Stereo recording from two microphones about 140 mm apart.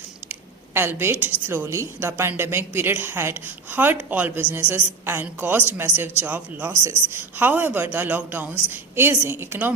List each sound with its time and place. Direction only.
0.3 s squish: 15° right (ahead or behind)
1.5 s a woman's voice: 15° right (ahead or behind)